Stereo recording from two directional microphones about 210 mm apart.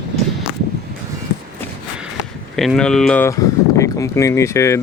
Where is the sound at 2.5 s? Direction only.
Centre (ahead or behind).